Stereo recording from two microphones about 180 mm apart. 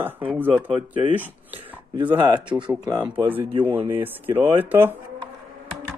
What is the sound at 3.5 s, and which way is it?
Speech, 30° right (ahead or behind).